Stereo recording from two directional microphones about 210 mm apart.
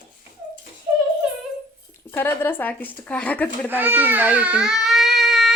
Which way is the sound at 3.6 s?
10° right (ahead or behind).